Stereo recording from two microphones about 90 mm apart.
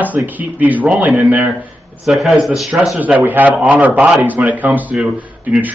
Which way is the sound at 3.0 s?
20° right (ahead or behind).